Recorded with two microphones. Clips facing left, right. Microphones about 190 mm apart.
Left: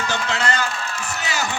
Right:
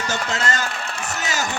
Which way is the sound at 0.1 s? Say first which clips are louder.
Even; 45° right (ahead or behind).